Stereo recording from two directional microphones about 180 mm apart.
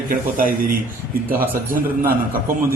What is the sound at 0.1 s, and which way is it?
Speech, 50° right (ahead or behind).